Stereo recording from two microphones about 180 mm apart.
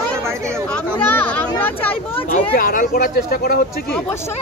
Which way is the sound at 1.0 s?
10° left (ahead or behind).